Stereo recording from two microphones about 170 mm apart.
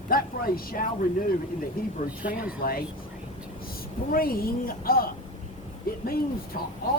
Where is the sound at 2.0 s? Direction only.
55° left (ahead or behind).